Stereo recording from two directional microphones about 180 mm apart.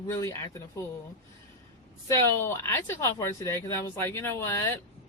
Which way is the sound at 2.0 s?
15° left (ahead or behind).